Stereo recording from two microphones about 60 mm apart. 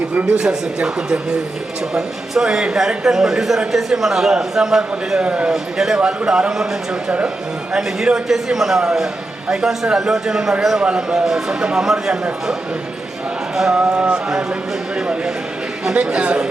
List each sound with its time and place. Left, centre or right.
0.2 s speech: centre
5.5 s speech: centre
7.7 s speech: centre
13.7 s speech: centre
16.0 s speech: centre